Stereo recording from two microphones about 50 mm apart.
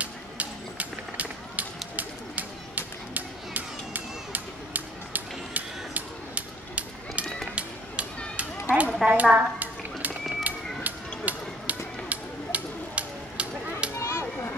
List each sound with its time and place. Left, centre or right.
0.0 s run: right
7.5 s music: right
8.6 s a sound: right
13.9 s children playing: left